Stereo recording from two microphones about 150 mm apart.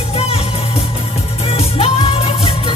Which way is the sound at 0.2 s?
40° left (ahead or behind).